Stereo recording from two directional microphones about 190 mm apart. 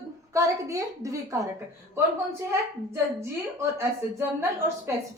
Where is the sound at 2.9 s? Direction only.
15° right (ahead or behind).